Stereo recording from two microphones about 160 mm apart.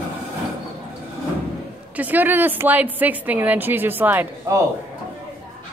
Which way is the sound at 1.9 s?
10° right (ahead or behind).